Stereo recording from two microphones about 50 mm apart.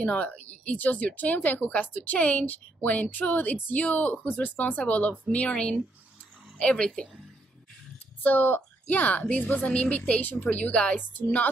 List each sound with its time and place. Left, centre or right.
0.0 s speech: left
4.1 s speech: left
8.2 s speech: left
11.0 s speech: left